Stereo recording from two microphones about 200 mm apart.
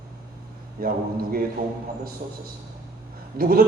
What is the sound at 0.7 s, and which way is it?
Speech, 45° right (ahead or behind).